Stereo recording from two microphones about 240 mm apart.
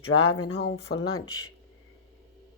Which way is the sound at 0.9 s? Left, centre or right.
Left.